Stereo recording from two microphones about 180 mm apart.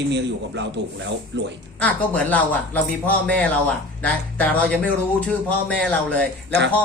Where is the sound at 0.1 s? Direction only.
75° right (ahead or behind).